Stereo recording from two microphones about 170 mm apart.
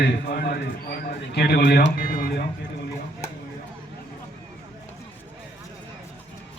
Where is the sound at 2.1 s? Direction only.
60° left (ahead or behind).